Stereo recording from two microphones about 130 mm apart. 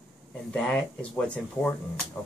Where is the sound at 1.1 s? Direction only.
5° left (ahead or behind).